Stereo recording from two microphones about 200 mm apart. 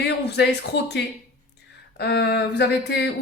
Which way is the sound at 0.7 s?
60° left (ahead or behind).